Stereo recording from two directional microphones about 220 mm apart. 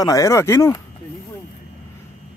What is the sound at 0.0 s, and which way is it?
Speech, 15° left (ahead or behind).